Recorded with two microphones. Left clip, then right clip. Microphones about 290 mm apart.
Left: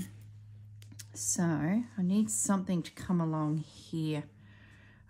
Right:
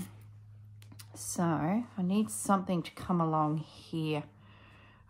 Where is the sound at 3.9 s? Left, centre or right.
Centre.